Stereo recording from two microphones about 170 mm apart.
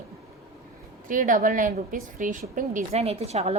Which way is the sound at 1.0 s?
50° right (ahead or behind).